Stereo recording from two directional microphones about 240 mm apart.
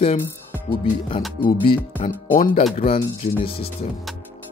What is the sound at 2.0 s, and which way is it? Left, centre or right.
Speech, left.